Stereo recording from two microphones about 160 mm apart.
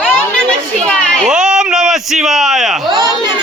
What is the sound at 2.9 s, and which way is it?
Speech, 25° right (ahead or behind).